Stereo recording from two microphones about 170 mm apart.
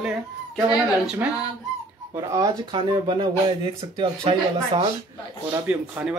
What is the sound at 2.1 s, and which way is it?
Speech, 20° right (ahead or behind).